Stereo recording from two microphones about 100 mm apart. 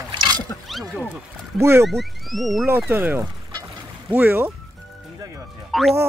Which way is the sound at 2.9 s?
20° right (ahead or behind).